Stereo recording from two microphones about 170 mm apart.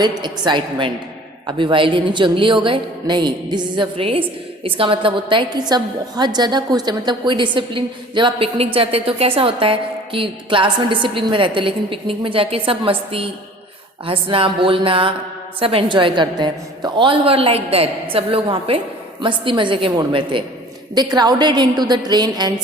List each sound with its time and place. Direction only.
0.2 s a woman's voice: 25° right (ahead or behind)